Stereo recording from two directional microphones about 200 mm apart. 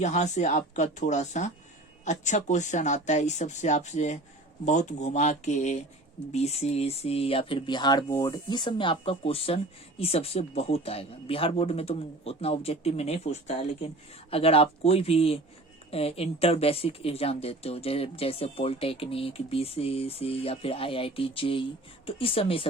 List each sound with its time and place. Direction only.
0.0 s speech: 35° left (ahead or behind)